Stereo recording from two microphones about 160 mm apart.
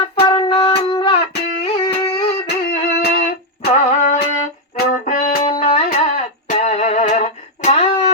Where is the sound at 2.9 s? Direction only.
90° left.